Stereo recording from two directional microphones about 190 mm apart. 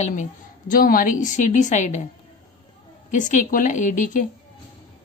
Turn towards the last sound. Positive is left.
turn(degrees=45)  # may be behind; listen again after turning